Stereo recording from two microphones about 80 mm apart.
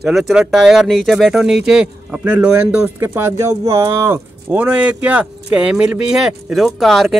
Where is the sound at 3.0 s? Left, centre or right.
Right.